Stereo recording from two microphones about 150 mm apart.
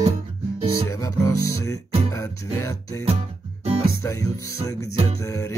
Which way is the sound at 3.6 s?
40° right (ahead or behind).